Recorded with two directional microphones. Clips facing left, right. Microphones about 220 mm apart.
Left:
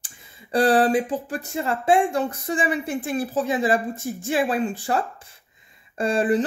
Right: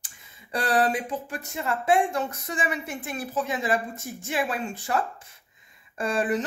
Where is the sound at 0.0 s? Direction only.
30° left (ahead or behind).